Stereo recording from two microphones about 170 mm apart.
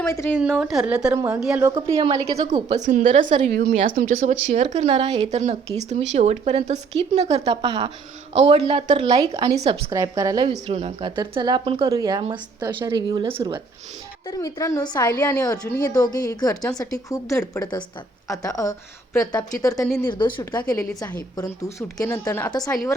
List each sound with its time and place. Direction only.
0.1 s a woman's voice: 15° left (ahead or behind)
0.3 s a woman's voice: 10° right (ahead or behind)
2.0 s a woman's voice: 30° right (ahead or behind)
2.8 s a woman's voice: 50° right (ahead or behind)
9.9 s a woman's voice: 20° right (ahead or behind)
10.5 s a woman's voice: 35° right (ahead or behind)
14.3 s a woman's voice: 20° left (ahead or behind)